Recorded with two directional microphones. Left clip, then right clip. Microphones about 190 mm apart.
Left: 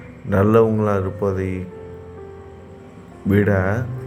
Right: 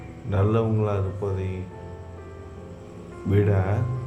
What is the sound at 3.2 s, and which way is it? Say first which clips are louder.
Speech: left 6 dB; 15° left (ahead or behind).